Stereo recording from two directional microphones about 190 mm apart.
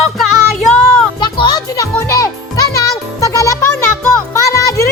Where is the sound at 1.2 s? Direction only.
20° left (ahead or behind).